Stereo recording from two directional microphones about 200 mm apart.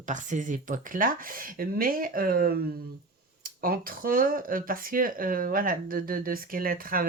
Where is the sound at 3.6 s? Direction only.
45° right (ahead or behind).